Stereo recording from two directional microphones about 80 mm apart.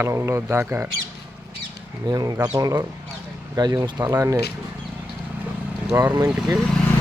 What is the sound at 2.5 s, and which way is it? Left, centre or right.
Speech, right.